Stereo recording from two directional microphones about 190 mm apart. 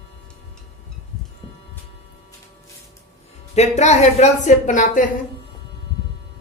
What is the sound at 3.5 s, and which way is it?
Speech, 35° left (ahead or behind).